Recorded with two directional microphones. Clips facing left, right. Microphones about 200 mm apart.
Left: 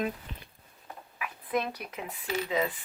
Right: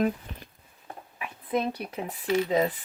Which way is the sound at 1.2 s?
25° right (ahead or behind).